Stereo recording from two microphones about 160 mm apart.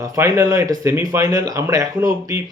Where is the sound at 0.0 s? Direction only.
20° right (ahead or behind).